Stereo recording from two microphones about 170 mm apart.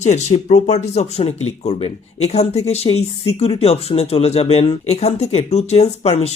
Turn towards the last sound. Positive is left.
turn(degrees=40)  # may be behind; listen again after turning